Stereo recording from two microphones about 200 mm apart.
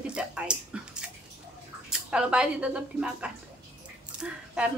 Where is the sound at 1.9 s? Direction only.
5° right (ahead or behind).